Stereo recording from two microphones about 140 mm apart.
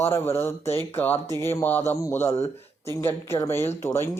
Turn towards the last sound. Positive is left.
turn(degrees=20)  # may be behind; listen again after turning